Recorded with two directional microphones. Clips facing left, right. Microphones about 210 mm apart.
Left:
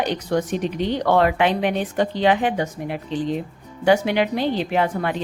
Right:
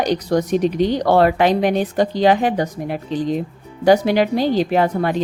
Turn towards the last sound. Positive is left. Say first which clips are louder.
# right 4 dB
turn(degrees=-40)  # may be behind; listen again after turning